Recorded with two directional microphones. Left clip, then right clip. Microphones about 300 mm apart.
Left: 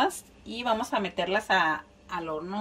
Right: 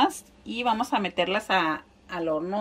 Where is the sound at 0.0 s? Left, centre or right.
Centre.